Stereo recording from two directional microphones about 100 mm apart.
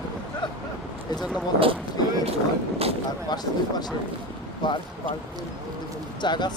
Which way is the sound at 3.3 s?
45° left (ahead or behind).